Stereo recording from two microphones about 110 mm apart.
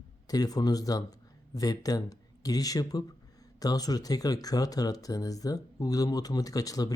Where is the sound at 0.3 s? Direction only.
35° left (ahead or behind).